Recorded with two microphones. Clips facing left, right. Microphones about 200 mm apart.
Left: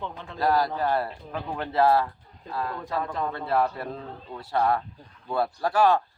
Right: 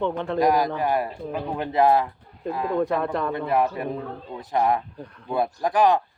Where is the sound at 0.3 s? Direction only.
15° right (ahead or behind).